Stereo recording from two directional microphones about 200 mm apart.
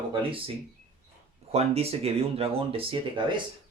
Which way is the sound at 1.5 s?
30° right (ahead or behind).